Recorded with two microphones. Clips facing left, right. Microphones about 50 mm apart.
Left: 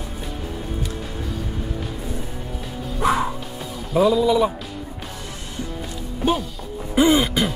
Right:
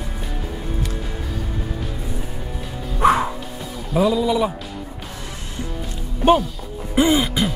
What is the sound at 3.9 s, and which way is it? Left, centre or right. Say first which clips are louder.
Speech: left 1 dB; centre.